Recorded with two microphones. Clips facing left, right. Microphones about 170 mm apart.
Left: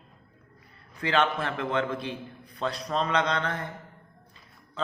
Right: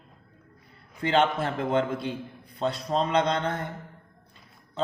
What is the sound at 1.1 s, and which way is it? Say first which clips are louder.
Speech: right 2 dB; 25° right (ahead or behind).